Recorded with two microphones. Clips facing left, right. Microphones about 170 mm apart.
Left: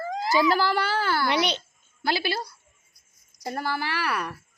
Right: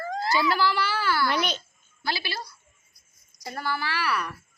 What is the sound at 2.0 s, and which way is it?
Speech, 55° left (ahead or behind).